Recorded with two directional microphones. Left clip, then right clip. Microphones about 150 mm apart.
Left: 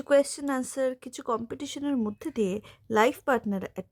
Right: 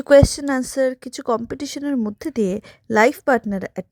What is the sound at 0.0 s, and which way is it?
A woman's voice, 35° right (ahead or behind).